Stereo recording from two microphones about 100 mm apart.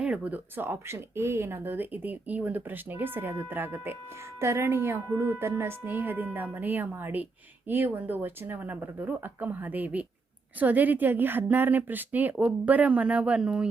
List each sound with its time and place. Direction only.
0.0 s speech: 15° right (ahead or behind)